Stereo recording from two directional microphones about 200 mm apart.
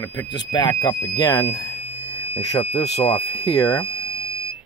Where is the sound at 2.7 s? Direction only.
30° left (ahead or behind).